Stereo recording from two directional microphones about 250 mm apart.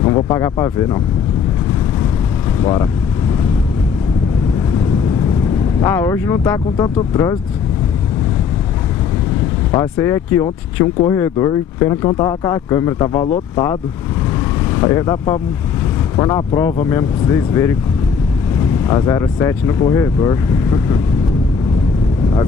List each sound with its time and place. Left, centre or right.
0.1 s speech: centre
2.6 s speech: centre
5.8 s speech: centre
9.7 s speech: centre
14.8 s speech: centre
18.9 s speech: centre